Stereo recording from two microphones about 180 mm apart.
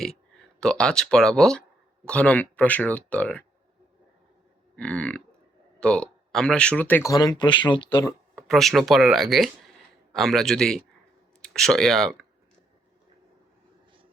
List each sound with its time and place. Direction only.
0.6 s speech: 5° left (ahead or behind)
4.8 s speech: 5° left (ahead or behind); by 8.1 s 25° left (ahead or behind)
8.4 s speech: centre (ahead or behind)